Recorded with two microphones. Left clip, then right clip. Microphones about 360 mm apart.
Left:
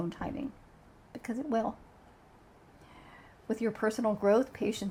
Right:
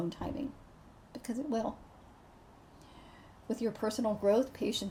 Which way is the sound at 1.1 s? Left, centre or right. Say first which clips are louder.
Left 3 dB; left.